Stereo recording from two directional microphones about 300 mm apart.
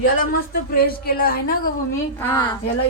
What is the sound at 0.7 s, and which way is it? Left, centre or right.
Speech, left.